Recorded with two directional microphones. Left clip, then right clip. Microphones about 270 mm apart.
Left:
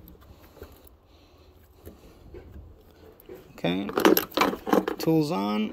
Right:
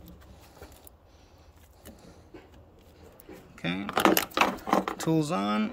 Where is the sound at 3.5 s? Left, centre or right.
Centre.